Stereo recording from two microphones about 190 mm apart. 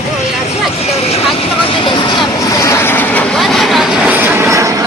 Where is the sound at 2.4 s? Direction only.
15° left (ahead or behind).